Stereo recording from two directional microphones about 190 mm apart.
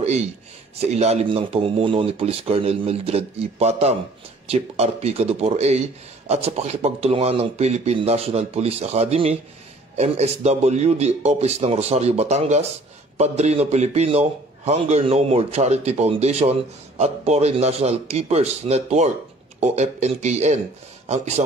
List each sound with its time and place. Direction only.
0.0 s a man's voice: 35° right (ahead or behind)